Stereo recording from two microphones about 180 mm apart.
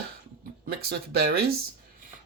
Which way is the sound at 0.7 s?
60° right (ahead or behind).